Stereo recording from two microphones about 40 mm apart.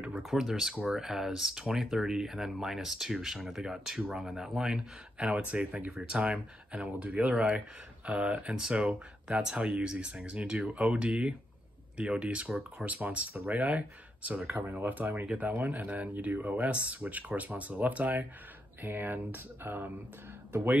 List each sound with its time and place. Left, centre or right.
0.2 s speech: centre
5.2 s speech: right
5.9 s speech: centre
6.2 s speech: right
14.7 s speech: right
15.2 s speech: right
18.8 s speech: right